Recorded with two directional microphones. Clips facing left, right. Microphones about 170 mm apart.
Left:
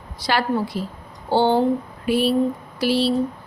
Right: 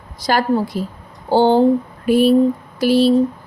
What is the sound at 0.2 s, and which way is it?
Speech, 45° right (ahead or behind).